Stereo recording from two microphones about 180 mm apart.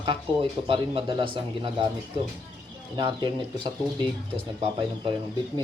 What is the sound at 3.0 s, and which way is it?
Speech, 25° right (ahead or behind).